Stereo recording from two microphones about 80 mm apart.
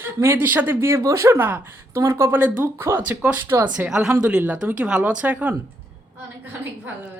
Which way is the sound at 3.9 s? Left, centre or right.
Centre.